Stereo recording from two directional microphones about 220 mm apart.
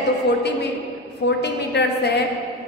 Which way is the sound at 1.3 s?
50° left (ahead or behind).